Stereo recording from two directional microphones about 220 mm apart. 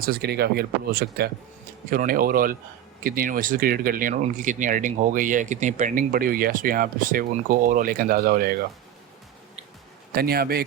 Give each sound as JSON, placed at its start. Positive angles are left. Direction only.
{"t": 0.0, "sound": "speech", "side_deg": -45}
{"t": 10.2, "sound": "speech", "side_deg": -45}